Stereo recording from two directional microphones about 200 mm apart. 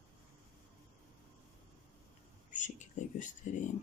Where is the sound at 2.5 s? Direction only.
40° left (ahead or behind).